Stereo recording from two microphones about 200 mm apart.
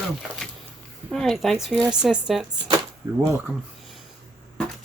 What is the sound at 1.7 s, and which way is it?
Speech, 20° right (ahead or behind).